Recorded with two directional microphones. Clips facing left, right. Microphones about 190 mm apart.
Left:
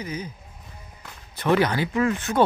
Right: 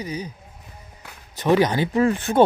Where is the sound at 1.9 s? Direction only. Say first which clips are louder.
Right 3 dB; 35° right (ahead or behind).